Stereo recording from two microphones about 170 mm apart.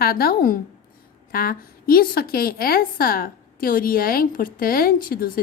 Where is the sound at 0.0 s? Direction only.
65° left (ahead or behind).